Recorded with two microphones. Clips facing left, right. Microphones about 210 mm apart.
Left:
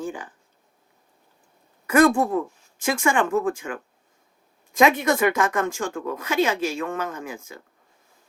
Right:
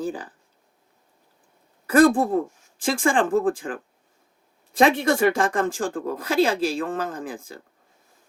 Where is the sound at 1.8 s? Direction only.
35° right (ahead or behind).